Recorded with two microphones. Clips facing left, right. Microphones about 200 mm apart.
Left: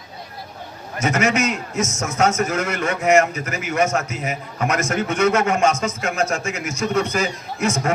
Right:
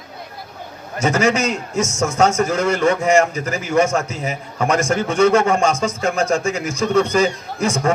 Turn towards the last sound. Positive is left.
turn(degrees=-30)  # may be behind; listen again after turning